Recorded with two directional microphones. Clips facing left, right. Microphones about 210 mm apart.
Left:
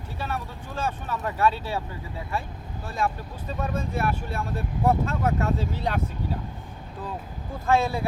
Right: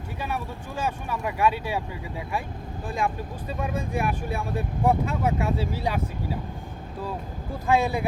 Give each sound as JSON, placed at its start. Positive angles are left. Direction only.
{"t": 0.2, "sound": "speech", "side_deg": -10}
{"t": 3.0, "sound": "speech", "side_deg": -15}
{"t": 7.7, "sound": "speech", "side_deg": -15}